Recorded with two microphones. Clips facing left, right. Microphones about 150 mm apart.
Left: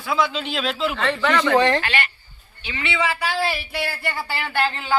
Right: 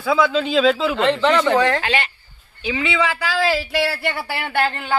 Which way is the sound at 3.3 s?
90° right.